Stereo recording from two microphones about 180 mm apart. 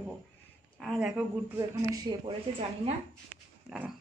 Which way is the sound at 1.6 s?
25° right (ahead or behind).